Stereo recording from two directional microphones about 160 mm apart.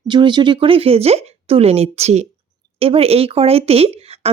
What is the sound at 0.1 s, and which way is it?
Speech, 30° right (ahead or behind).